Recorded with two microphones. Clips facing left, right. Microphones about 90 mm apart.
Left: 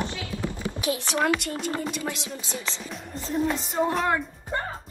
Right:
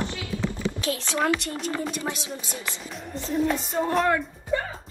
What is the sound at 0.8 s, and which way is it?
Speech, 20° left (ahead or behind).